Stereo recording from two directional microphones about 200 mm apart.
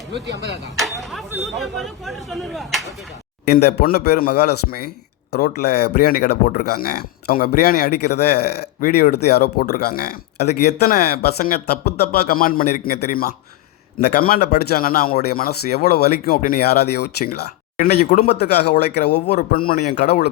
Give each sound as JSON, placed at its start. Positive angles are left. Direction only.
{"t": 0.1, "sound": "speech", "side_deg": -60}
{"t": 0.8, "sound": "a sound", "side_deg": 0}
{"t": 1.5, "sound": "speech", "side_deg": 0}
{"t": 3.4, "sound": "speech", "side_deg": 50}